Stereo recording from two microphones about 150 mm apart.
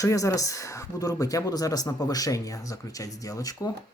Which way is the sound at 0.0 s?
20° left (ahead or behind).